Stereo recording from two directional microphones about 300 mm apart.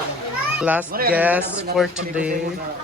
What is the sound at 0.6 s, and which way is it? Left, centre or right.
Speech, centre.